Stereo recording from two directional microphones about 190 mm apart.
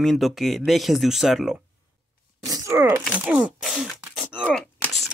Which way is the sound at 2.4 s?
15° right (ahead or behind).